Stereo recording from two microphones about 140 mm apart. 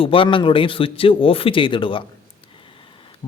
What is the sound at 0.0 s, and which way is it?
A man's voice, 40° left (ahead or behind).